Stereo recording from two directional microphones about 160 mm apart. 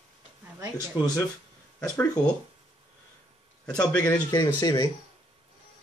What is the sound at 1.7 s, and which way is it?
Speech, 5° left (ahead or behind).